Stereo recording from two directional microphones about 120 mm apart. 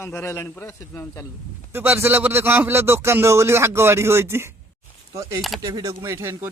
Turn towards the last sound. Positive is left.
turn(degrees=-20)  # may be behind; listen again after turning